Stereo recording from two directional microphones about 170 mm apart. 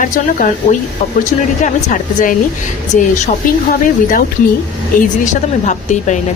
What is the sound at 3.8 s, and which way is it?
A woman's voice, 50° left (ahead or behind).